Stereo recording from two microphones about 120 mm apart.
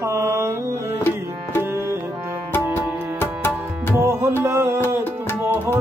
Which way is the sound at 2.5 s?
20° left (ahead or behind).